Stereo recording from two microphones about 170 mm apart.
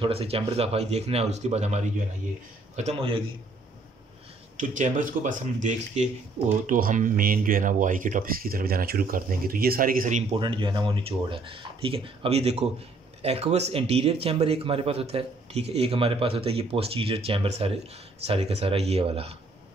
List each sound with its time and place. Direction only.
0.0 s speech: 35° right (ahead or behind)
4.6 s speech: 45° right (ahead or behind)
10.3 s speech: 30° right (ahead or behind)